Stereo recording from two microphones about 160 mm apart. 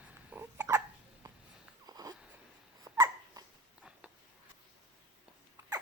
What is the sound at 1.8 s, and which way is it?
Wheeze, 25° right (ahead or behind).